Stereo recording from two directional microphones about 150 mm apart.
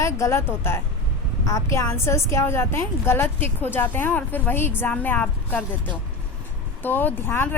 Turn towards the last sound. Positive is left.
turn(degrees=15)  # may be behind; listen again after turning